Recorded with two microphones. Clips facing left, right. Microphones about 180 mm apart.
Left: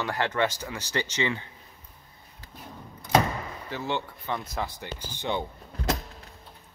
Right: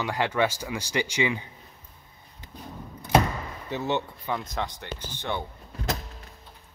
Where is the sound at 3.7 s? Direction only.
20° right (ahead or behind).